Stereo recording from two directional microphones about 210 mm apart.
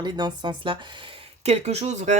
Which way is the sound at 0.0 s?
20° right (ahead or behind).